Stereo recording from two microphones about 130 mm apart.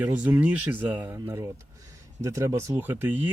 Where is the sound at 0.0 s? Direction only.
15° right (ahead or behind).